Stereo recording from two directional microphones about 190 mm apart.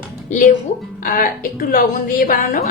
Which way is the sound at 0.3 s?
40° left (ahead or behind).